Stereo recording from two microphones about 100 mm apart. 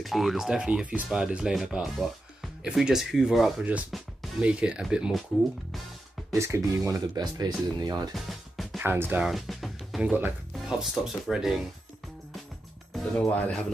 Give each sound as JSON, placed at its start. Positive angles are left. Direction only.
{"t": 0.0, "sound": "speech", "side_deg": 0}
{"t": 4.4, "sound": "speech", "side_deg": -10}
{"t": 6.3, "sound": "speech", "side_deg": -30}
{"t": 8.1, "sound": "music", "side_deg": 0}
{"t": 8.7, "sound": "speech", "side_deg": -20}
{"t": 9.2, "sound": "music", "side_deg": 0}
{"t": 10.7, "sound": "speech", "side_deg": -5}
{"t": 13.2, "sound": "speech", "side_deg": 15}